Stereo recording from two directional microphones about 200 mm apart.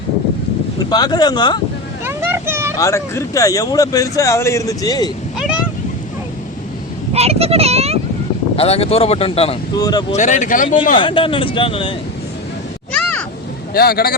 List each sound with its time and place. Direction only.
0.8 s speech: 20° left (ahead or behind)
2.0 s vehicle: 10° right (ahead or behind)
2.7 s speech: 15° left (ahead or behind)
5.4 s a sound: 5° right (ahead or behind)
7.1 s a child's voice: 30° right (ahead or behind)
8.5 s speech: 30° left (ahead or behind)
10.1 s speech: 35° left (ahead or behind)
10.9 s speech: 25° left (ahead or behind)
12.9 s a sound: 5° left (ahead or behind)
13.7 s a man's voice: 50° left (ahead or behind)